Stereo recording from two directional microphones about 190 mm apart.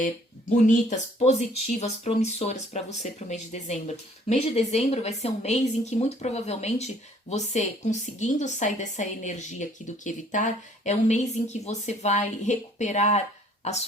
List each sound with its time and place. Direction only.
0.7 s speech: 40° left (ahead or behind)